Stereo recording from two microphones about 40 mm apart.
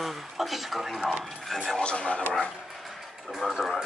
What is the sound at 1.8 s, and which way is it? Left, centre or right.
Speech, left.